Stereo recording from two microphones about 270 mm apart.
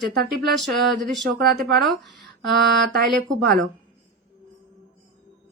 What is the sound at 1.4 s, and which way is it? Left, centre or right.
Speech, right.